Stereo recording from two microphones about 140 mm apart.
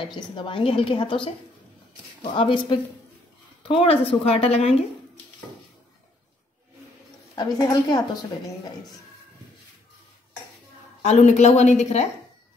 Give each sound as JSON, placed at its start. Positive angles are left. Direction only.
{"t": 0.0, "sound": "a woman's voice", "side_deg": 35}
{"t": 2.3, "sound": "a woman's voice", "side_deg": 35}
{"t": 7.3, "sound": "a woman's voice", "side_deg": 30}
{"t": 11.1, "sound": "a woman's voice", "side_deg": 55}